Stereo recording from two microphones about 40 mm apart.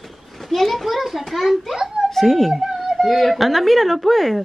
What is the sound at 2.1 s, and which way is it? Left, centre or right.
Speech, centre.